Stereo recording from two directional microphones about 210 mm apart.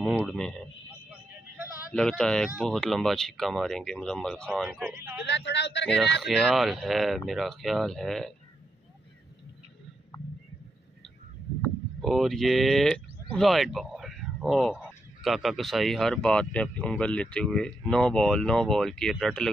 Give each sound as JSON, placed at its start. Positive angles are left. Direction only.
{"t": 0.2, "sound": "speech", "side_deg": 0}
{"t": 1.9, "sound": "speech", "side_deg": 5}
{"t": 5.2, "sound": "a man's voice", "side_deg": 55}
{"t": 6.2, "sound": "speech", "side_deg": 0}
{"t": 11.6, "sound": "speech", "side_deg": 0}